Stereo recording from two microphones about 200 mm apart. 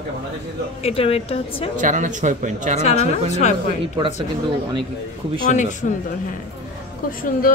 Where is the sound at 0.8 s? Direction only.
30° left (ahead or behind).